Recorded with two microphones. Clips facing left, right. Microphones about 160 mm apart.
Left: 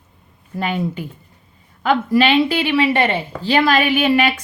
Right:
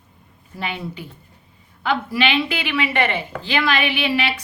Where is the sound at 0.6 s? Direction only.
45° left (ahead or behind).